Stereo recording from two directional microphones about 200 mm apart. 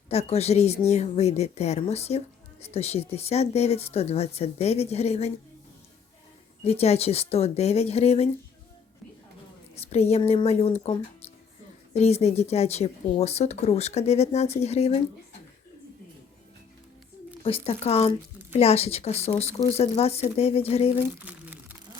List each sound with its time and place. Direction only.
0.1 s speech: 30° left (ahead or behind)
6.7 s speech: 30° left (ahead or behind)
9.7 s speech: 30° left (ahead or behind)
11.9 s speech: 30° left (ahead or behind)
17.4 s speech: 30° left (ahead or behind)
21.2 s crumpling: 10° right (ahead or behind)